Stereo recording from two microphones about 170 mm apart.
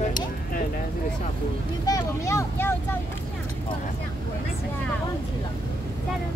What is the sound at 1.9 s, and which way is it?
Speech, 15° left (ahead or behind).